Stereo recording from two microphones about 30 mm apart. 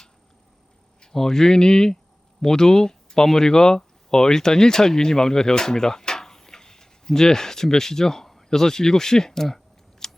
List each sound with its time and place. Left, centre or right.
1.1 s speech: centre
10.0 s scissors: centre